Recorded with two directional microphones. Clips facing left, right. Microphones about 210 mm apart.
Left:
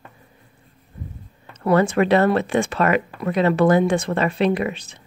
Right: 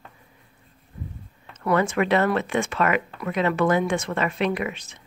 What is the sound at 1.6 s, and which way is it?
Speech, 35° left (ahead or behind).